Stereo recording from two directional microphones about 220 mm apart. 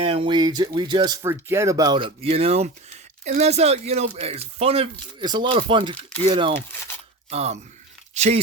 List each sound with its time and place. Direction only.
0.0 s speech: 25° right (ahead or behind)